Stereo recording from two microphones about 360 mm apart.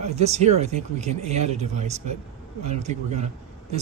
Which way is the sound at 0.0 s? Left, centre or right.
Centre.